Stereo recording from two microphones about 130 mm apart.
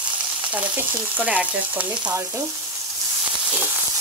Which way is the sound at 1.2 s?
10° right (ahead or behind).